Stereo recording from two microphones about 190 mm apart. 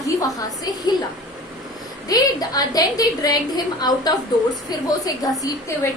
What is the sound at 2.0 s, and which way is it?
A woman's voice, 20° left (ahead or behind).